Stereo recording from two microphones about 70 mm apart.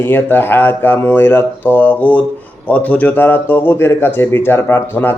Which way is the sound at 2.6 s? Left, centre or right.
Left.